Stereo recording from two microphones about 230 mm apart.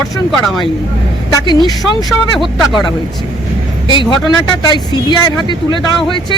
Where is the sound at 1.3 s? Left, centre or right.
Centre.